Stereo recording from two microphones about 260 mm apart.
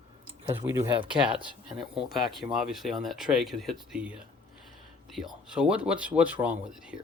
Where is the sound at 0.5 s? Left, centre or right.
Centre.